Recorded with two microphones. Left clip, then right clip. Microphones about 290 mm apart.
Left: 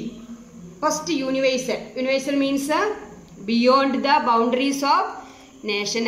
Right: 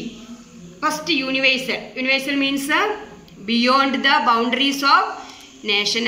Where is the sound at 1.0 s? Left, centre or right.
Left.